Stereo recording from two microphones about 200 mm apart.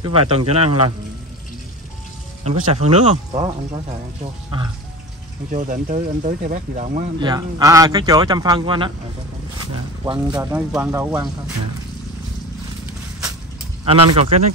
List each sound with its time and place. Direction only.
0.0 s speech: 30° right (ahead or behind)
2.4 s speech: 30° right (ahead or behind)
5.5 s speech: 40° right (ahead or behind)
7.2 s speech: 20° right (ahead or behind)
10.0 s speech: 20° right (ahead or behind)
10.4 s speech: 10° right (ahead or behind)
13.8 s speech: 30° right (ahead or behind)